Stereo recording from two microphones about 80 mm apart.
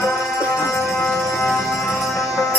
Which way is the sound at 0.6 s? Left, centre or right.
Centre.